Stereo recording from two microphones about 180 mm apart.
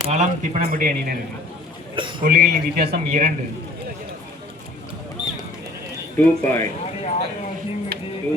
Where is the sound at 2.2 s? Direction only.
55° right (ahead or behind).